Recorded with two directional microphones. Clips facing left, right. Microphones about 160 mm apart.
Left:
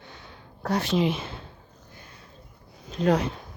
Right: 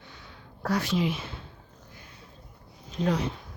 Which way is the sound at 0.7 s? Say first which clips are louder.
Left 3 dB; 25° left (ahead or behind).